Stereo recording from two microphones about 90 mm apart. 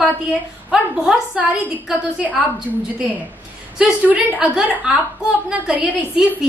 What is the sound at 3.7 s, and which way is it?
A woman's voice, 15° right (ahead or behind).